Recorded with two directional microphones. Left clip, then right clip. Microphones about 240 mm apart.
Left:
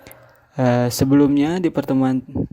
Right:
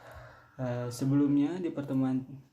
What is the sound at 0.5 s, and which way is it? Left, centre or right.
Speech, left.